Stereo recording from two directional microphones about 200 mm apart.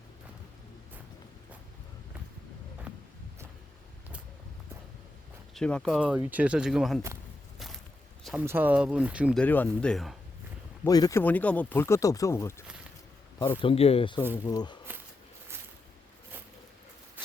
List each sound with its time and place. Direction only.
2.9 s a sound: 5° right (ahead or behind)
5.5 s speech: 5° left (ahead or behind)
8.2 s speech: 5° right (ahead or behind)
9.4 s speech: 10° left (ahead or behind)
10.8 s speech: 20° left (ahead or behind)
14.3 s speech: 15° left (ahead or behind)